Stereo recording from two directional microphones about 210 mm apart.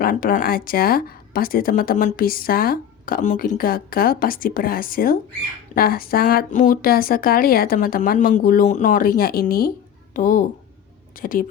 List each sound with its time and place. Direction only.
0.0 s speech: 45° left (ahead or behind)